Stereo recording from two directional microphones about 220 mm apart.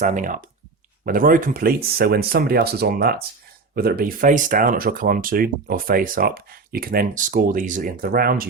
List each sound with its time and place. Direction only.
0.0 s speech: 35° right (ahead or behind)